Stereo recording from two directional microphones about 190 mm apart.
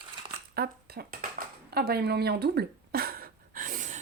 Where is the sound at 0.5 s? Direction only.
55° right (ahead or behind).